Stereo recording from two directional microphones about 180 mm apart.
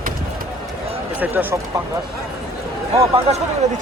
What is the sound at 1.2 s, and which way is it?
Speech, 10° right (ahead or behind).